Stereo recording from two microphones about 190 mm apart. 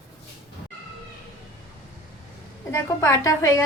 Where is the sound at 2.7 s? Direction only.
15° left (ahead or behind).